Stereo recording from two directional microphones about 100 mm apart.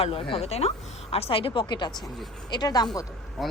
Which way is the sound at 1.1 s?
75° left (ahead or behind).